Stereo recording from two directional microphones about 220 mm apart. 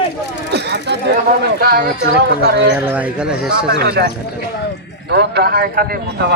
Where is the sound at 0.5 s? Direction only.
50° right (ahead or behind).